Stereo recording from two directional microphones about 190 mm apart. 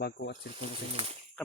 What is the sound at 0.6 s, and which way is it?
Speech, 30° right (ahead or behind).